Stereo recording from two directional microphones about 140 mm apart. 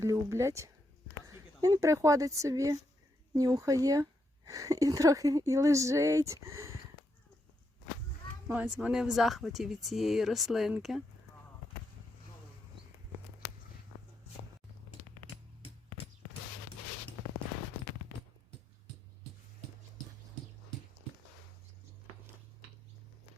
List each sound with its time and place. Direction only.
0.0 s speech: 20° right (ahead or behind)
8.4 s speech: 10° right (ahead or behind)